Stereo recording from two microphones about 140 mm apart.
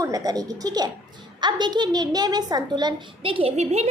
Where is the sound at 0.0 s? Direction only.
25° right (ahead or behind).